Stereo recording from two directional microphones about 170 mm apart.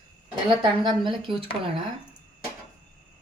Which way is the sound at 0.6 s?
30° right (ahead or behind).